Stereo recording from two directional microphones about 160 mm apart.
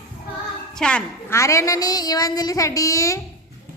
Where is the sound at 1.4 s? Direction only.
20° left (ahead or behind).